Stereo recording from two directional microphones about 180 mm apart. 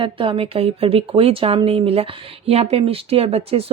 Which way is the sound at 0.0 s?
30° right (ahead or behind).